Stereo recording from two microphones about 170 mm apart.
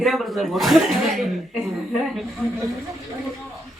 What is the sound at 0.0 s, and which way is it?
A woman's voice, centre (ahead or behind).